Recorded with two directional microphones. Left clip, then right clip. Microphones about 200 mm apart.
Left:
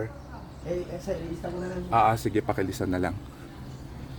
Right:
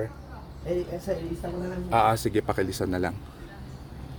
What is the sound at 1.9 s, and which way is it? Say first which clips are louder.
Speech: even; 10° right (ahead or behind).